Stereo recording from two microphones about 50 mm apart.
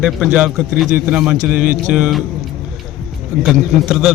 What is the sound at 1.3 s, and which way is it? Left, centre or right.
Speech, right.